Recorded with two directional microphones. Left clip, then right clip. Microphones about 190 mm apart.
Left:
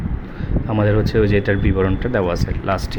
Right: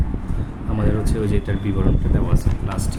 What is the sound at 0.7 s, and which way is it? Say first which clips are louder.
Speech: left 7 dB; 30° left (ahead or behind).